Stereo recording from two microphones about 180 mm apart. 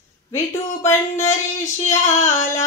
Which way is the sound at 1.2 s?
40° left (ahead or behind).